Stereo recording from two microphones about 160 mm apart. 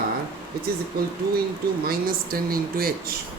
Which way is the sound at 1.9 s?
65° right (ahead or behind).